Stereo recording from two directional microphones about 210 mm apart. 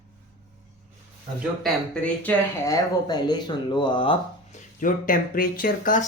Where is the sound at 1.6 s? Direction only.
5° left (ahead or behind); by 6.0 s 40° left (ahead or behind).